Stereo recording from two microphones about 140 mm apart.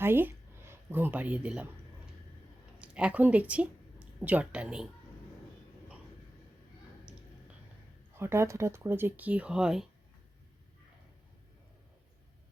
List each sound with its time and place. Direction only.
0.0 s speech: 15° right (ahead or behind)
2.7 s speech: 10° right (ahead or behind)
7.1 s a sound: 5° right (ahead or behind)
8.1 s speech: 20° right (ahead or behind)